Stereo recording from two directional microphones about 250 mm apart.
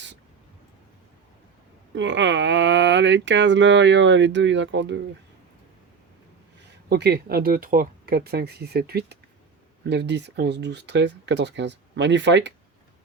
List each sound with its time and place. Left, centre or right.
2.0 s speech: right
6.9 s speech: right